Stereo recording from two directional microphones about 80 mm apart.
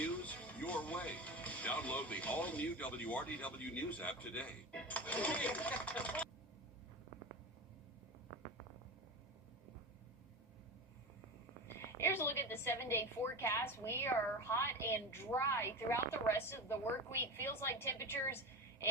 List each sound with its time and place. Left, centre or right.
0.0 s speech: centre
11.9 s a woman's voice: left